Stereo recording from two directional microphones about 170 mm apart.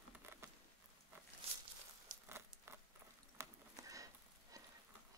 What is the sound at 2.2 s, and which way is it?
Patter, 15° right (ahead or behind).